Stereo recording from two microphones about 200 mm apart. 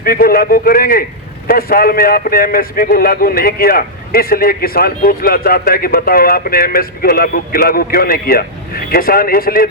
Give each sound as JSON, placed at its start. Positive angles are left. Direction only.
{"t": 0.0, "sound": "a man's voice", "side_deg": 50}